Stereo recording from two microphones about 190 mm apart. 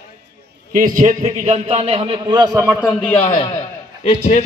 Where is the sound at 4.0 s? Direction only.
35° left (ahead or behind).